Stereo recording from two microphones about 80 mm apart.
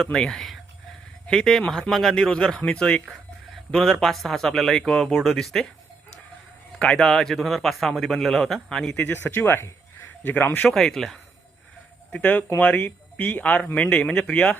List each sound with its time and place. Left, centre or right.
0.0 s speech: centre
3.1 s a sound: centre
4.0 s speech: centre
6.7 s speech: centre
9.1 s speech: left
10.7 s speech: centre
12.1 s speech: centre